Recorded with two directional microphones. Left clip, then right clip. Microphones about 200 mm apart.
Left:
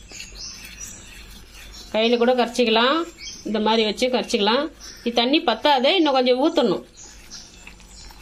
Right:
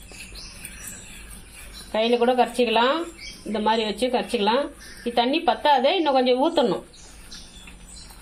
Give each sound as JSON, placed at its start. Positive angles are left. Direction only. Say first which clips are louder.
{"t": 1.9, "sound": "speech", "louder": "left 2 dB", "side_deg": 15}